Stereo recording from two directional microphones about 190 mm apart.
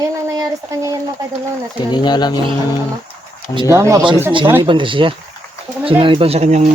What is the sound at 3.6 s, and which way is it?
Speech, 15° right (ahead or behind).